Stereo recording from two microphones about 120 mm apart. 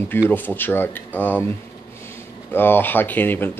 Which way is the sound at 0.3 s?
15° left (ahead or behind).